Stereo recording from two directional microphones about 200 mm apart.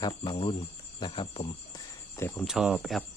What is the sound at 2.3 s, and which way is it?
Speech, centre (ahead or behind).